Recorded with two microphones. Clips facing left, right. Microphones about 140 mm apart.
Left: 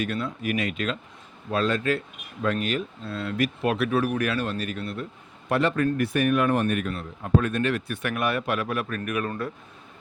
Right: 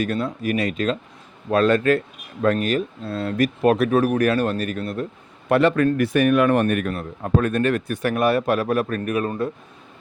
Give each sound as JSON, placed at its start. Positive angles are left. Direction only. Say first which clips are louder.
{"t": 0.0, "sound": "speech", "louder": "right 5 dB", "side_deg": -40}
{"t": 1.5, "sound": "speech", "louder": "right 7 dB", "side_deg": -60}
{"t": 2.4, "sound": "speech", "louder": "right 6 dB", "side_deg": -45}
{"t": 5.5, "sound": "speech", "louder": "right 6 dB", "side_deg": -70}